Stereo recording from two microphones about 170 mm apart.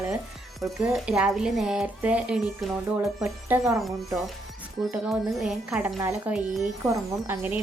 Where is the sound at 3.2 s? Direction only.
15° right (ahead or behind).